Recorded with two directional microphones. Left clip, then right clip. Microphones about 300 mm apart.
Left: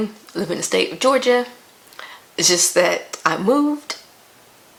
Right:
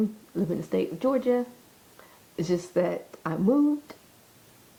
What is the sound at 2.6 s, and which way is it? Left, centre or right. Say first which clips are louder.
Speech: left 10 dB; centre.